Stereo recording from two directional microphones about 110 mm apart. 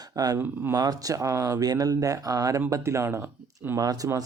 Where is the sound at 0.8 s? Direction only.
35° right (ahead or behind).